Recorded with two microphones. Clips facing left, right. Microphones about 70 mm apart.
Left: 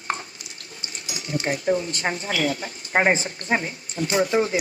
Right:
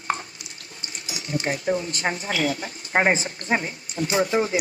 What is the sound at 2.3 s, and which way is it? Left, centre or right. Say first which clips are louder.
Speech: left 1 dB; right.